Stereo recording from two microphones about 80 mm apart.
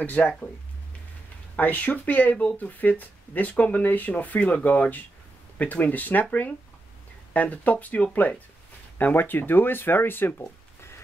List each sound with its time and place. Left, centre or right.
0.0 s speech: left
1.6 s speech: centre
7.3 s speech: centre
10.4 s a sound: left